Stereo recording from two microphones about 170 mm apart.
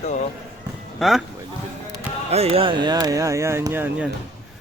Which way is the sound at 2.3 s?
35° right (ahead or behind).